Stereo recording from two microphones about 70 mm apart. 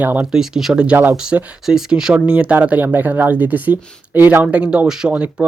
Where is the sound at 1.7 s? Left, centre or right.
Centre.